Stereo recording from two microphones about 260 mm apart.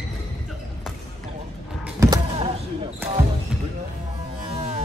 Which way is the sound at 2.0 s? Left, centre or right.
Centre.